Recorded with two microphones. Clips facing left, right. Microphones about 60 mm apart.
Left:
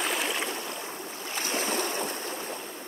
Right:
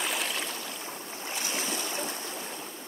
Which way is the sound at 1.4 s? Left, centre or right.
Left.